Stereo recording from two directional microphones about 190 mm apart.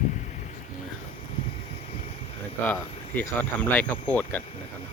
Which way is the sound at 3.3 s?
10° left (ahead or behind).